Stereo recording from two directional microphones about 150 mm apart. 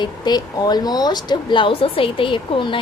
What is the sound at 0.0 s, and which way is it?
Speech, 25° left (ahead or behind).